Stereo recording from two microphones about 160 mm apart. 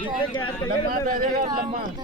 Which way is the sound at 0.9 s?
60° right (ahead or behind).